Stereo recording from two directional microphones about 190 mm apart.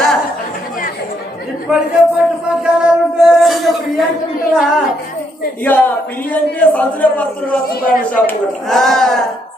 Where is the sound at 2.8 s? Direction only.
Centre (ahead or behind).